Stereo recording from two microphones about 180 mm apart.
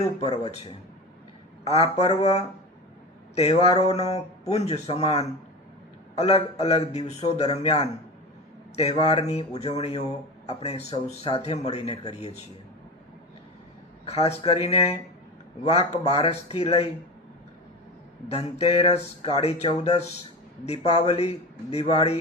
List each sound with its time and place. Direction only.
0.2 s speech: 35° left (ahead or behind)
1.6 s speech: 35° left (ahead or behind)
14.1 s speech: 35° left (ahead or behind)
18.3 s speech: 35° left (ahead or behind)